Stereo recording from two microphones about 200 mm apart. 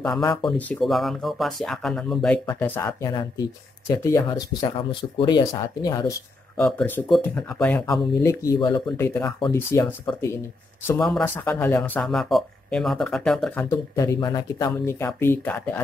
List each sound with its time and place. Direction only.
0.2 s speech: 20° left (ahead or behind)
0.5 s speech: 5° left (ahead or behind)
13.7 s speech: 15° left (ahead or behind)